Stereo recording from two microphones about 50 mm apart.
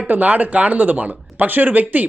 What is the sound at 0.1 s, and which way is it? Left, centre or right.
Speech, right.